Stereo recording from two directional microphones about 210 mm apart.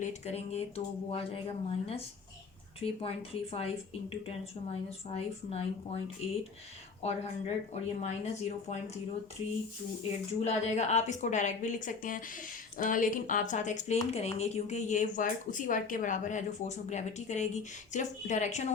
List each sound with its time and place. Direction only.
0.0 s a woman's voice: 30° left (ahead or behind)
7.0 s a woman's voice: 30° left (ahead or behind)
10.4 s a woman's voice: 30° left (ahead or behind)